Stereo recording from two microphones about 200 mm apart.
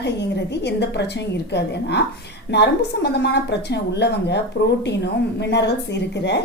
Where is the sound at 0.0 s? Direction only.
55° left (ahead or behind).